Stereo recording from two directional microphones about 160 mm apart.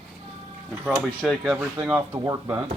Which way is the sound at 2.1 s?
20° right (ahead or behind).